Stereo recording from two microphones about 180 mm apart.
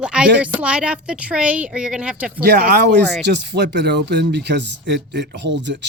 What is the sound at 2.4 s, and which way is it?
Speech, 65° right (ahead or behind).